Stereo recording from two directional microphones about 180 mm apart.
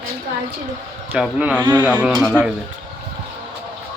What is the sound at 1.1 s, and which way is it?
A man's voice, 5° right (ahead or behind).